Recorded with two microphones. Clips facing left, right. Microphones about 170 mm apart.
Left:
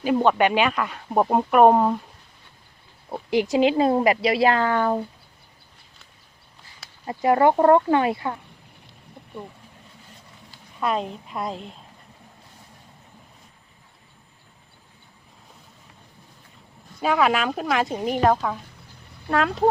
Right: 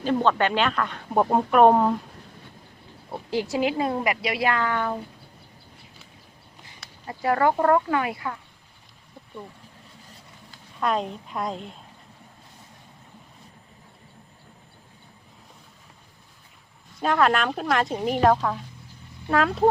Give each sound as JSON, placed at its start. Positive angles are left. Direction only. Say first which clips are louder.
{"t": 0.0, "sound": "speech", "louder": "left 3 dB", "side_deg": 10}
{"t": 3.1, "sound": "a woman's voice", "louder": "left 5 dB", "side_deg": 15}
{"t": 7.1, "sound": "speech", "louder": "left 4 dB", "side_deg": 20}
{"t": 10.8, "sound": "a woman's voice", "louder": "even", "side_deg": 5}
{"t": 17.0, "sound": "a woman's voice", "louder": "left 1 dB", "side_deg": 5}